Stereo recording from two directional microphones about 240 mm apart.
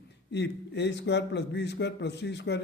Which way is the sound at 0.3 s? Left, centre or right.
Left.